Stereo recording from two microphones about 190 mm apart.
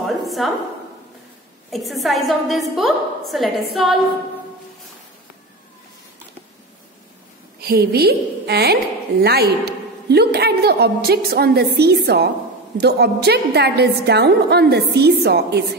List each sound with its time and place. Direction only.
0.0 s a sound: centre (ahead or behind)
1.7 s a woman's voice: centre (ahead or behind)
7.6 s a woman's voice: 55° right (ahead or behind)